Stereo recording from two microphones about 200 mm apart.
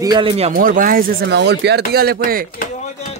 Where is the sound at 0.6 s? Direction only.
45° right (ahead or behind).